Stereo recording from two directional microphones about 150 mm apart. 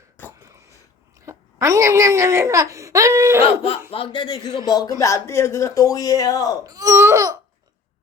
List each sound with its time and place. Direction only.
0.3 s throat clearing: 20° right (ahead or behind)
1.2 s speech: 20° right (ahead or behind)
3.9 s a man's voice: 35° left (ahead or behind)
6.7 s speech: 25° right (ahead or behind)